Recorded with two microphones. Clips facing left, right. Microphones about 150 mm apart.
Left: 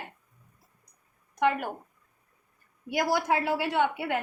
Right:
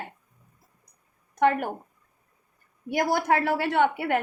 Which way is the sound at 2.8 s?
55° right (ahead or behind).